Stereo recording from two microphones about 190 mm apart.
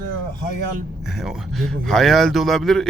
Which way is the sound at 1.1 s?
Centre (ahead or behind).